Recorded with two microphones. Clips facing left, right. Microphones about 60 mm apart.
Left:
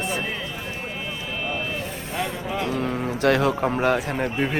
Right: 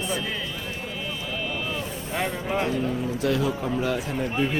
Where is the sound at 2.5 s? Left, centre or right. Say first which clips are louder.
Right 3 dB; right.